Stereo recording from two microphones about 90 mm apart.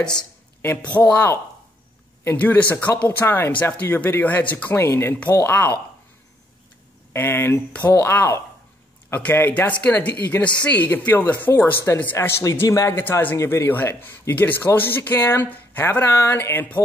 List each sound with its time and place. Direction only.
0.6 s speech: 20° left (ahead or behind)
2.3 s speech: 20° left (ahead or behind)
7.1 s speech: 25° left (ahead or behind)
12.9 s speech: 20° left (ahead or behind)